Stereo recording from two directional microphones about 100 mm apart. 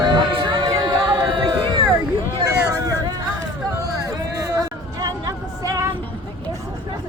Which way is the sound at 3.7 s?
35° right (ahead or behind).